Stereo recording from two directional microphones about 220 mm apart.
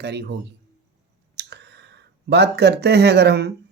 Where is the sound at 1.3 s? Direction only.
50° right (ahead or behind).